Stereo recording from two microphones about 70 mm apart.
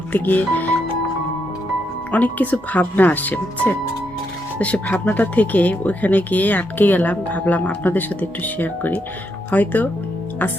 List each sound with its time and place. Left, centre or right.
0.1 s speech: left
2.1 s speech: left